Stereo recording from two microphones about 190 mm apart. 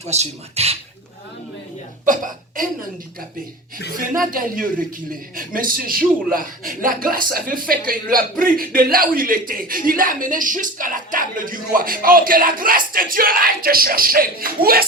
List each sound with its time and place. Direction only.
0.0 s speech: 35° right (ahead or behind)
2.0 s speech: 45° right (ahead or behind)
3.9 s speech: 45° right (ahead or behind)